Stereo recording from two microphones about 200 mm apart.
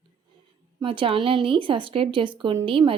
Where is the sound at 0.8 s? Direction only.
25° right (ahead or behind).